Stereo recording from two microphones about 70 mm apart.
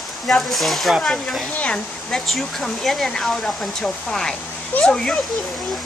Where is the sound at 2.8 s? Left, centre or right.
Centre.